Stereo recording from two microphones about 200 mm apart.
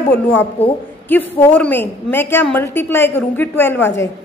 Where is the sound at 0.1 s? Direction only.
10° left (ahead or behind).